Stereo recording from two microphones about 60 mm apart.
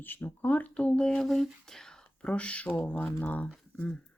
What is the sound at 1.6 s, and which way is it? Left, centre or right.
Speech, centre.